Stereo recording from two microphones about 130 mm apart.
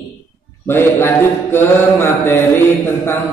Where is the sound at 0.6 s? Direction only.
20° left (ahead or behind).